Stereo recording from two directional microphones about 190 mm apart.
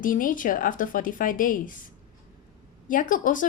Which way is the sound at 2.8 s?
45° left (ahead or behind).